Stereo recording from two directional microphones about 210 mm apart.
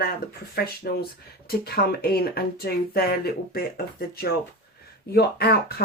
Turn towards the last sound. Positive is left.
turn(degrees=50)  # may be behind; listen again after turning